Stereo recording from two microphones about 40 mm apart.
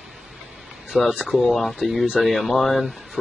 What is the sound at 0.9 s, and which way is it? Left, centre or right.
Speech, right.